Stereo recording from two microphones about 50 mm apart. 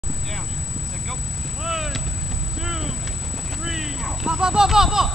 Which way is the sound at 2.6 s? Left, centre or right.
Centre.